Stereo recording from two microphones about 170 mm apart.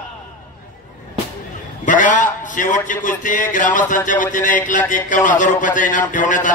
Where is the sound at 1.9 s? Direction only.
50° left (ahead or behind).